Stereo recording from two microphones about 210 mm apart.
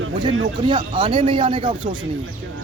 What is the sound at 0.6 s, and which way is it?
Speech, 25° right (ahead or behind).